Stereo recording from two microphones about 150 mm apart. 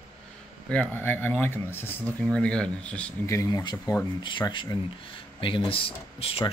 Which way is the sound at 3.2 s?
20° left (ahead or behind).